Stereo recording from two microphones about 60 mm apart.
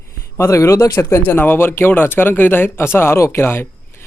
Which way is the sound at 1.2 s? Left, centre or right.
Left.